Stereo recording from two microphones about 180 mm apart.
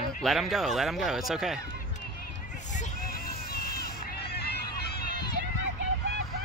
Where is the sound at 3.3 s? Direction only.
60° left (ahead or behind).